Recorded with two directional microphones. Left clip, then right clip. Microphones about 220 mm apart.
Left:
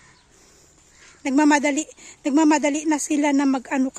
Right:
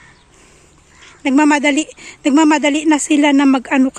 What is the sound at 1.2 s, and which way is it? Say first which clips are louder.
A woman's voice: right 6 dB; 10° left (ahead or behind).